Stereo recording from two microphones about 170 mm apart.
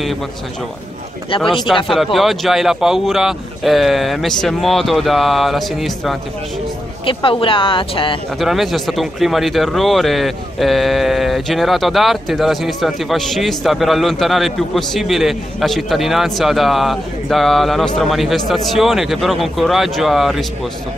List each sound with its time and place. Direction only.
1.3 s speech: 30° left (ahead or behind)
1.7 s speech: centre (ahead or behind)
7.1 s speech: 30° left (ahead or behind)
8.4 s speech: centre (ahead or behind)